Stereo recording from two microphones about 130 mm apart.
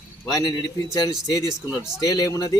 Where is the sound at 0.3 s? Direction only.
30° left (ahead or behind).